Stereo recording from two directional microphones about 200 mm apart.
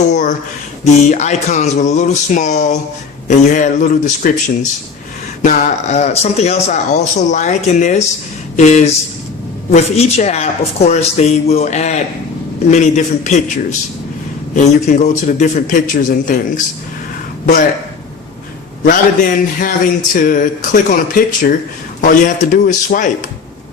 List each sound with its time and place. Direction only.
0.1 s a man's voice: 40° left (ahead or behind)
18.9 s a man's voice: 45° left (ahead or behind)